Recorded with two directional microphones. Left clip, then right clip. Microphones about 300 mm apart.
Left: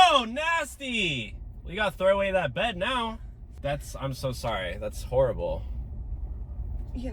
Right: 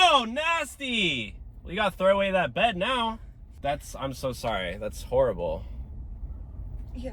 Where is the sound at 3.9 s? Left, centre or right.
Centre.